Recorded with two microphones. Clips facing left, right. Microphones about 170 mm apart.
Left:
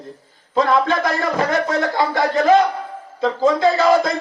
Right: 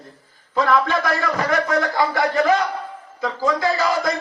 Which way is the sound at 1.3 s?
25° left (ahead or behind).